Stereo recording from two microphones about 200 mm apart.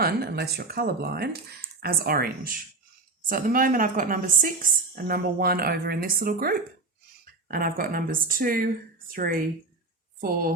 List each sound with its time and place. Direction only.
0.0 s speech: 50° right (ahead or behind)